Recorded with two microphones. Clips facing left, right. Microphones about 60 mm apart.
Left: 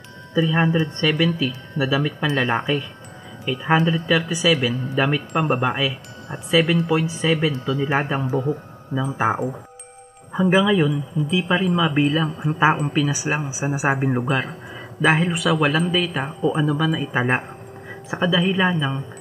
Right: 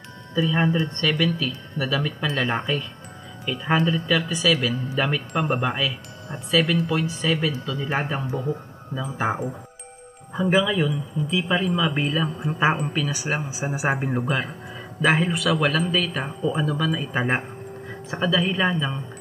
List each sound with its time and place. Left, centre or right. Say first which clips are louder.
0.3 s speech: left 3 dB; centre
6.6 s speech: left 2 dB; centre
6.9 s speech: left 4 dB; centre
7.9 s speech: left 2 dB; centre
9.2 s speech: left 3 dB; centre